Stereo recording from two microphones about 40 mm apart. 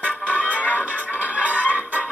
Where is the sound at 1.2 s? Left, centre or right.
Right.